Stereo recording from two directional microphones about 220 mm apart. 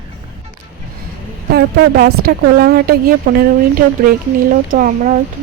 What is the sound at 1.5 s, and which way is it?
A woman's voice, 45° right (ahead or behind).